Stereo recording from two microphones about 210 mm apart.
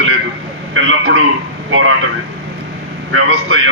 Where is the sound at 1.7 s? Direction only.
70° right (ahead or behind).